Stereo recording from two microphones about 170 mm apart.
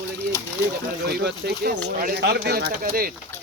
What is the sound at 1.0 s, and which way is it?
Speech, 75° right (ahead or behind).